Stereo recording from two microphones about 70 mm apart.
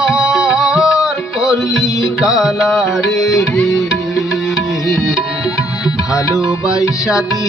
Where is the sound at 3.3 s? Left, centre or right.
Left.